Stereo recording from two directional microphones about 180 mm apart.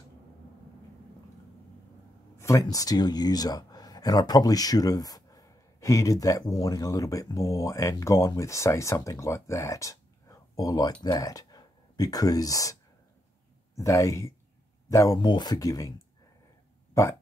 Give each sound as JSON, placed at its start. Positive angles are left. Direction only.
{"t": 2.3, "sound": "a man's voice", "side_deg": 15}
{"t": 13.7, "sound": "a man's voice", "side_deg": 20}